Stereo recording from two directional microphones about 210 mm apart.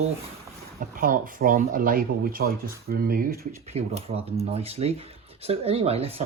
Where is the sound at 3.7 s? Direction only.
30° right (ahead or behind).